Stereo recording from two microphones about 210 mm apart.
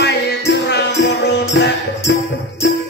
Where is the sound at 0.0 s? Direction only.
55° left (ahead or behind).